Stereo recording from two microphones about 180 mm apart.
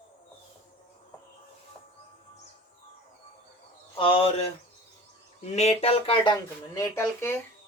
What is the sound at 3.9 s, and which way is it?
Speech, 30° left (ahead or behind).